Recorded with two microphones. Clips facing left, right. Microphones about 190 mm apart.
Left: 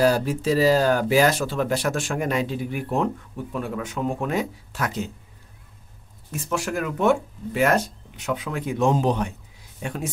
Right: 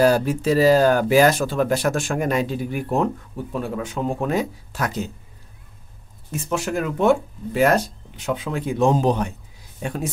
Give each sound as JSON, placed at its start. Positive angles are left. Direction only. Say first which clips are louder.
{"t": 0.0, "sound": "speech", "louder": "right 3 dB", "side_deg": -55}
{"t": 3.5, "sound": "speech", "louder": "right 2 dB", "side_deg": -30}
{"t": 6.3, "sound": "speech", "louder": "right 3 dB", "side_deg": -20}